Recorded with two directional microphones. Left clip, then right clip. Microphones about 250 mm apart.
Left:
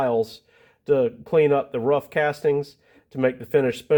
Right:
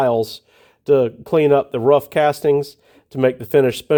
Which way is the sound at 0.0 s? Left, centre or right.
Right.